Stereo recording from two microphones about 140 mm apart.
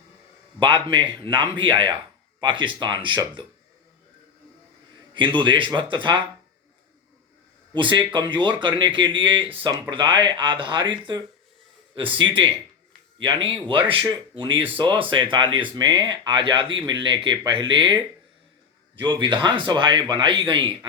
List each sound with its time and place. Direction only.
0.6 s speech: 35° right (ahead or behind)
5.4 s speech: 35° right (ahead or behind)
7.7 s speech: 35° right (ahead or behind)
19.0 s speech: 35° right (ahead or behind)